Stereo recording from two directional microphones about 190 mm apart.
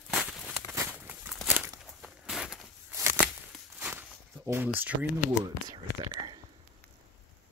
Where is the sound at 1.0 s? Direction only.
10° right (ahead or behind).